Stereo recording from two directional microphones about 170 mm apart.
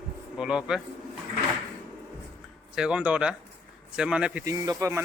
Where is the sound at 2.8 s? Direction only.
5° right (ahead or behind).